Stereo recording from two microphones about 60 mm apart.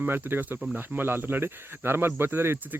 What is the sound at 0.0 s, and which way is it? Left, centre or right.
Speech, right.